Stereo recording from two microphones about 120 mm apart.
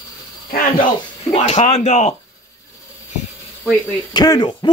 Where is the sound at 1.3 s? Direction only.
60° left (ahead or behind).